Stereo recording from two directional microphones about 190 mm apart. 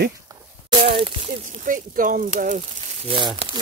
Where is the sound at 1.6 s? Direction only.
45° right (ahead or behind).